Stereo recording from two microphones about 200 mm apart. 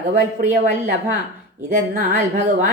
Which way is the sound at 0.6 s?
50° right (ahead or behind).